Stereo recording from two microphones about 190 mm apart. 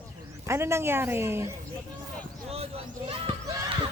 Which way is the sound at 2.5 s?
30° right (ahead or behind).